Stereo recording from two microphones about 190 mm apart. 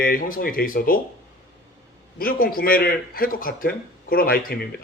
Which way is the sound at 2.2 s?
50° left (ahead or behind).